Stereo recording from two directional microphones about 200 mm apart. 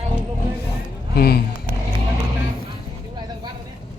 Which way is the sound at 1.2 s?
50° left (ahead or behind).